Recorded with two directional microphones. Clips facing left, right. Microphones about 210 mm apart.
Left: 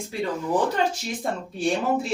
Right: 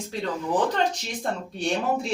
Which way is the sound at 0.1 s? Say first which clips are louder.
Left 2 dB; 10° left (ahead or behind).